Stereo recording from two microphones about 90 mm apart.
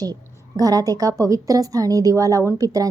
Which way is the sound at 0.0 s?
45° right (ahead or behind).